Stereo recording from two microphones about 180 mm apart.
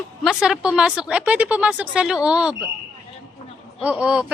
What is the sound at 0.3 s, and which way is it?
A woman's voice, 5° right (ahead or behind).